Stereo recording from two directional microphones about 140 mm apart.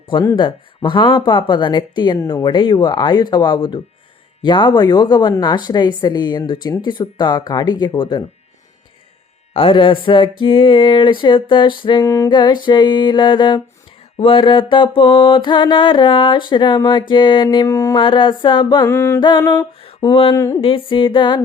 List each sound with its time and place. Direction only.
0.3 s mantra: 35° left (ahead or behind)
9.5 s mantra: 40° left (ahead or behind)
12.0 s music: 25° left (ahead or behind)
12.3 s mantra: 35° left (ahead or behind)
18.0 s mantra: 35° left (ahead or behind)
18.9 s music: 20° left (ahead or behind)
19.4 s a sound: 15° left (ahead or behind)
20.0 s mantra: 35° left (ahead or behind)
20.3 s music: 20° left (ahead or behind)
20.6 s mantra: 40° left (ahead or behind)